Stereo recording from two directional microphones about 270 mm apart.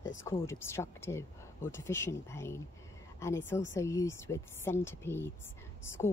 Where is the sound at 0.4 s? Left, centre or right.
Centre.